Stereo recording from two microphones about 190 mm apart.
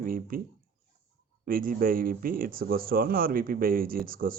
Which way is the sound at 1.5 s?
50° right (ahead or behind).